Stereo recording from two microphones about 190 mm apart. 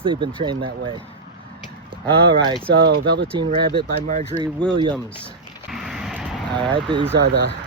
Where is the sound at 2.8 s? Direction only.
70° right (ahead or behind).